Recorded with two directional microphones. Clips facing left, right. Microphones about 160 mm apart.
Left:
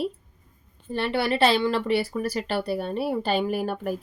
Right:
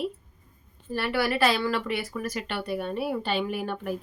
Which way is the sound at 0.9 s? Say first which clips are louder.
Left 2 dB; 25° left (ahead or behind).